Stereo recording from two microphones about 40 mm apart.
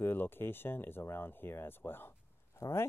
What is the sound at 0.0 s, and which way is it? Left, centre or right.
Speech, left.